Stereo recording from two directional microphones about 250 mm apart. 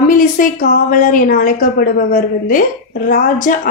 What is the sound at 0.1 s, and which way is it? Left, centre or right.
A woman's voice, left.